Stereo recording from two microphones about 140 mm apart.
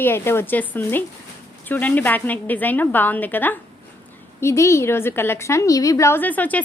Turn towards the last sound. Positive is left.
turn(degrees=10)  # may be behind; listen again after turning